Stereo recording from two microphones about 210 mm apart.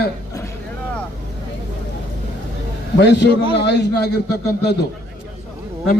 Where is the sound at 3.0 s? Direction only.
55° left (ahead or behind).